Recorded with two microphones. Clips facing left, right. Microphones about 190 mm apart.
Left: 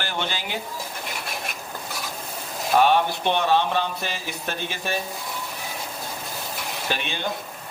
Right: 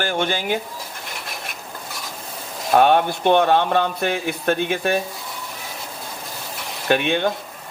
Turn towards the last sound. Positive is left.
turn(degrees=-60)  # may be behind; listen again after turning